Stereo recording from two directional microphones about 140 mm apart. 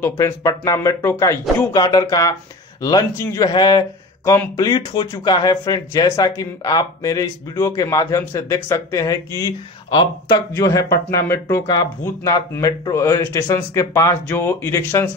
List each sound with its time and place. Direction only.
0.0 s speech: 20° left (ahead or behind)